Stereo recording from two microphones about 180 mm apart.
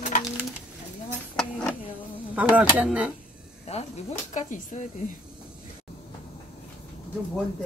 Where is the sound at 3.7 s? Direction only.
40° left (ahead or behind).